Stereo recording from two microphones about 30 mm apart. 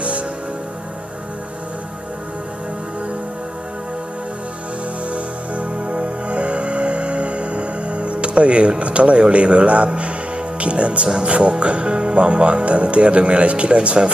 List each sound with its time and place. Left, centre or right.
5.1 s music: right
10.6 s speech: right